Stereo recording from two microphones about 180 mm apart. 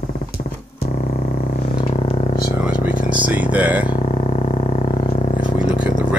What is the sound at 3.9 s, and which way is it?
Music, 40° left (ahead or behind).